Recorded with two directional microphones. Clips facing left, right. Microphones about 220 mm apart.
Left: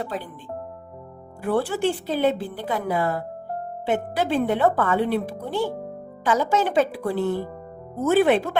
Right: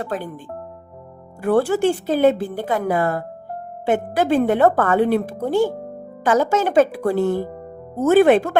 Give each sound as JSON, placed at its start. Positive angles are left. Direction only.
{"t": 1.4, "sound": "a woman's voice", "side_deg": -45}